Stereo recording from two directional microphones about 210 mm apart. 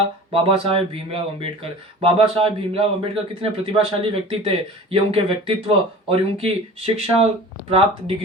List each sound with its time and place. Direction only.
0.3 s speech: 25° right (ahead or behind)